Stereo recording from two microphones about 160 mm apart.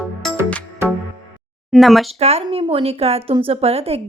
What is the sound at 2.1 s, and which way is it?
A woman's voice, 40° right (ahead or behind).